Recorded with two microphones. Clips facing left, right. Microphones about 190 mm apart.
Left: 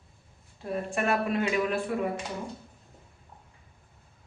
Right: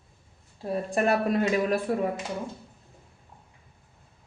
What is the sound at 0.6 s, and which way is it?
A woman's voice, 35° right (ahead or behind).